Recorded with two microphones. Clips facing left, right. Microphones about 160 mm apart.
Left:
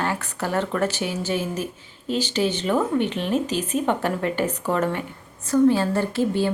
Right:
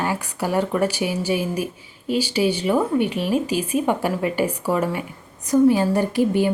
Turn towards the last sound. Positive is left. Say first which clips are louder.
# right 3 dB
turn(degrees=-15)  # may be behind; listen again after turning